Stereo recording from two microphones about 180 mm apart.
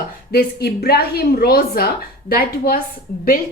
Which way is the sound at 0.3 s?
60° left (ahead or behind).